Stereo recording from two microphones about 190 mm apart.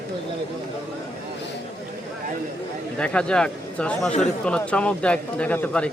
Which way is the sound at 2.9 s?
5° left (ahead or behind).